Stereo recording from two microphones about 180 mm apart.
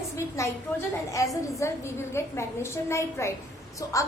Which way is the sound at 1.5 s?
15° left (ahead or behind).